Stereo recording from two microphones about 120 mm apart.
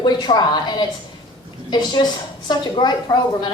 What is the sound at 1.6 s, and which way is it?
A woman's voice, 40° left (ahead or behind).